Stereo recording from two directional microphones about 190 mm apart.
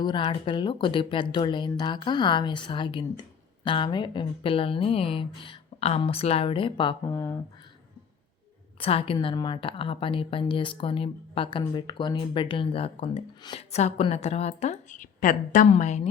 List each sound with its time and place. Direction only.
0.0 s speech: 25° left (ahead or behind)
8.8 s a woman's voice: 30° left (ahead or behind)